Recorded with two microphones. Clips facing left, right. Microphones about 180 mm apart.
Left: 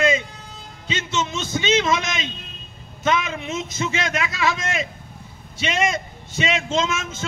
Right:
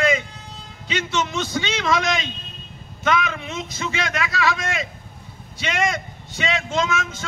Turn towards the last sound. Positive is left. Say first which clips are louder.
# even
turn(degrees=20)  # may be behind; listen again after turning